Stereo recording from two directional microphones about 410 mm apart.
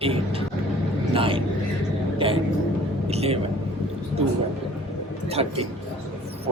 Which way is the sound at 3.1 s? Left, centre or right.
Centre.